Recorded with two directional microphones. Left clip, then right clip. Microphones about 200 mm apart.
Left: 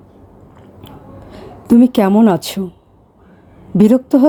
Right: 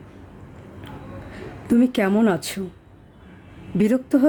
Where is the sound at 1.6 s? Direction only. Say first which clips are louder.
Left 8 dB; 25° left (ahead or behind).